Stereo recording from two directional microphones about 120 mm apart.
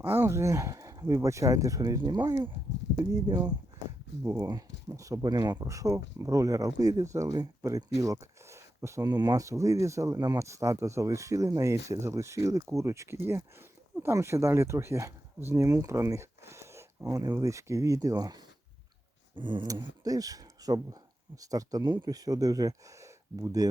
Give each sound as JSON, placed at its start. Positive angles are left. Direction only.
{"t": 0.0, "sound": "speech", "side_deg": -15}
{"t": 4.2, "sound": "speech", "side_deg": -25}
{"t": 8.0, "sound": "a sound", "side_deg": -25}
{"t": 9.1, "sound": "speech", "side_deg": -30}
{"t": 20.1, "sound": "speech", "side_deg": -30}